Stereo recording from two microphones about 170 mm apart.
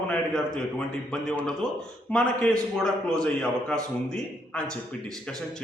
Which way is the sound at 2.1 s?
5° left (ahead or behind).